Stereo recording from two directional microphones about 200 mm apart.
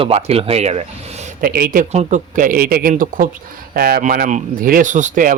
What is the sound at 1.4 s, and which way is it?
Speech, 45° right (ahead or behind).